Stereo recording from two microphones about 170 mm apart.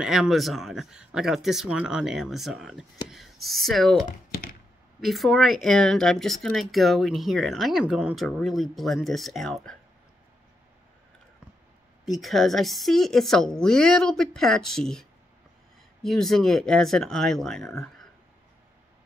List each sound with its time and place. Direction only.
0.0 s speech: centre (ahead or behind)
4.3 s a sound: 60° left (ahead or behind)
5.0 s speech: centre (ahead or behind)
12.0 s speech: centre (ahead or behind)